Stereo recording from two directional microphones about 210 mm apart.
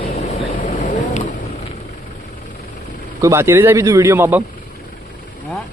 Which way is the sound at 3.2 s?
15° right (ahead or behind).